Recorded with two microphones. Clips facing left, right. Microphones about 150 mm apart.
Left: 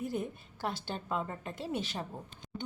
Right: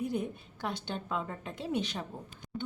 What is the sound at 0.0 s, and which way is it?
A woman's voice, centre (ahead or behind).